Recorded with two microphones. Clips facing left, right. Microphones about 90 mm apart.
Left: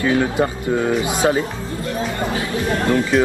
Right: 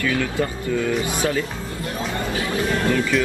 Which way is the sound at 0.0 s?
30° left (ahead or behind).